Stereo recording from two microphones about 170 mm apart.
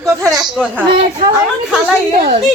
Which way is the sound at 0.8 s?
30° right (ahead or behind).